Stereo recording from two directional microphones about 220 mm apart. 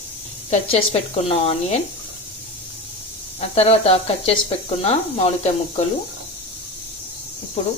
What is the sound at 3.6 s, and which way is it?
Speech, 25° left (ahead or behind).